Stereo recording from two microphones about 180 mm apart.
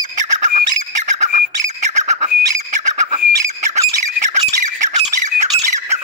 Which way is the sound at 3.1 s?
40° right (ahead or behind).